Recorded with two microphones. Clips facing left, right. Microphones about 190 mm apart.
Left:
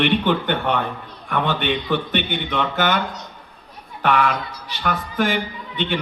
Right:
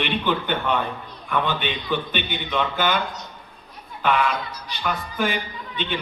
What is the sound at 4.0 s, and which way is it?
Speech, 65° left (ahead or behind).